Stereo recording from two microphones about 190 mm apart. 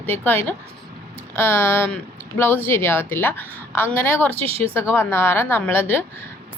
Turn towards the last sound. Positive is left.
turn(degrees=10)  # may be behind; listen again after turning